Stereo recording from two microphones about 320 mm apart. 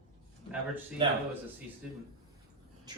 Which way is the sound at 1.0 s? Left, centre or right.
Centre.